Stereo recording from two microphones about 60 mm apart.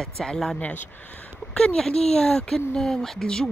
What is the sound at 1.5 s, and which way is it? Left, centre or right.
A woman's voice, centre.